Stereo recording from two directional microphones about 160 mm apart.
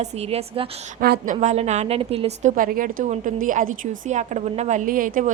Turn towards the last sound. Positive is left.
turn(degrees=-60)  # may be behind; listen again after turning